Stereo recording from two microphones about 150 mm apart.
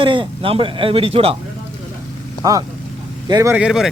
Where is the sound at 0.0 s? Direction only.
35° right (ahead or behind).